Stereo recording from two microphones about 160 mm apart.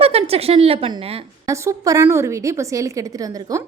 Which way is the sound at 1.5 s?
20° right (ahead or behind).